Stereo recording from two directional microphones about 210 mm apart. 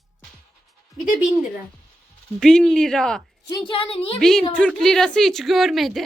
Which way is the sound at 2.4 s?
Centre (ahead or behind).